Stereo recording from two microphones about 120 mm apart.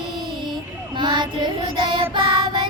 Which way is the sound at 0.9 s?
40° right (ahead or behind).